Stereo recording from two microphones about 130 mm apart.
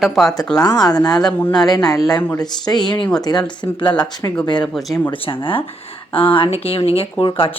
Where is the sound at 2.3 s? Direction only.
30° left (ahead or behind).